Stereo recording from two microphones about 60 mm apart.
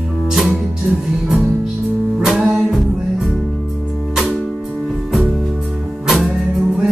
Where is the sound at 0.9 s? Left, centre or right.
Centre.